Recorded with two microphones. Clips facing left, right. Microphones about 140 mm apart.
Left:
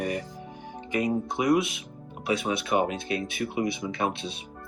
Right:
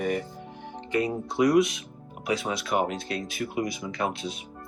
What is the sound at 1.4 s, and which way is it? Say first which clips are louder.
Speech: right 4 dB; 25° left (ahead or behind).